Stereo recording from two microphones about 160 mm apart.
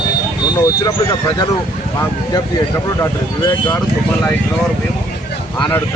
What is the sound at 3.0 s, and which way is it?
Speech, 20° left (ahead or behind).